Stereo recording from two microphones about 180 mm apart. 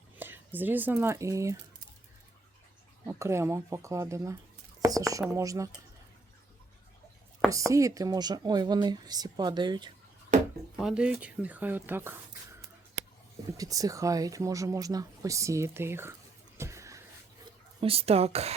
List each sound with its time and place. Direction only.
0.2 s speech: 10° right (ahead or behind)
3.1 s speech: 15° right (ahead or behind)
4.8 s a sound: 20° right (ahead or behind)
5.3 s speech: 20° right (ahead or behind)
7.5 s speech: 15° right (ahead or behind)
10.3 s a sound: 45° right (ahead or behind)
10.8 s speech: 5° right (ahead or behind)
16.6 s a sound: 15° right (ahead or behind)
17.7 s speech: 30° right (ahead or behind)